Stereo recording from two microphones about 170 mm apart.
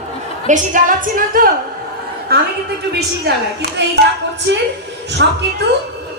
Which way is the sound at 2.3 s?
65° right (ahead or behind).